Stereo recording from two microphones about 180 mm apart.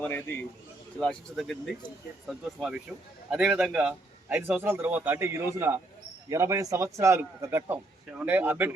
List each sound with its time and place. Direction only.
0.0 s a man's voice: 10° left (ahead or behind); by 8.7 s 10° right (ahead or behind)